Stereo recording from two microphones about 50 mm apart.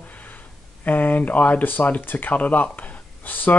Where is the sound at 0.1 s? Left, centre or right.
Left.